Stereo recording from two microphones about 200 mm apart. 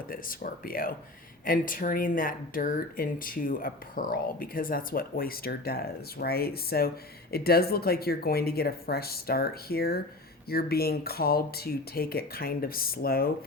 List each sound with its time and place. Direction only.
0.1 s speech: 45° left (ahead or behind)